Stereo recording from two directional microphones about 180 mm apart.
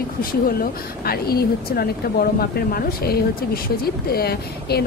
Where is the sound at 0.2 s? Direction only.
55° left (ahead or behind).